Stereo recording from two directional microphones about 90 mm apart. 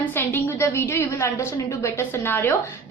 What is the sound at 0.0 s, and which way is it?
A woman's voice, 25° left (ahead or behind).